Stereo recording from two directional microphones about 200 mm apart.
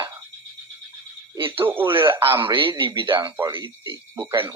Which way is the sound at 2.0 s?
10° right (ahead or behind).